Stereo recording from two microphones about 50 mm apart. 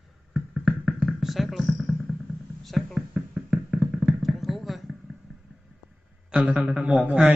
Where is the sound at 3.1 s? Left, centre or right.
Centre.